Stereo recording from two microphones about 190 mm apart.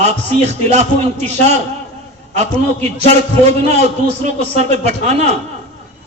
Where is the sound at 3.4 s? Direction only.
35° right (ahead or behind).